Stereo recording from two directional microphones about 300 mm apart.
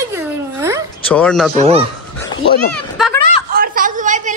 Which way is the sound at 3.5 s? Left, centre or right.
Right.